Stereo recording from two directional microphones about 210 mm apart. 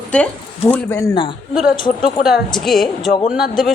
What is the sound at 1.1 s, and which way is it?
Speech, 25° left (ahead or behind).